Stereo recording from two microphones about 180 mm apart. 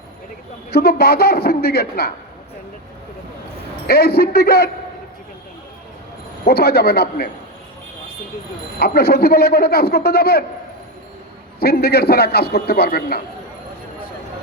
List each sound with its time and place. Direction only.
0.7 s a man's voice: 60° left (ahead or behind)
3.8 s a man's voice: 60° left (ahead or behind)
6.4 s a man's voice: 60° left (ahead or behind)
8.8 s a man's voice: 60° left (ahead or behind)
11.6 s a man's voice: 60° left (ahead or behind)